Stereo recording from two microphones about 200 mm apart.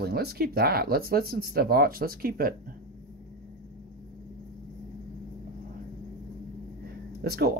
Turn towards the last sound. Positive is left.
turn(degrees=-50)  # may be behind; listen again after turning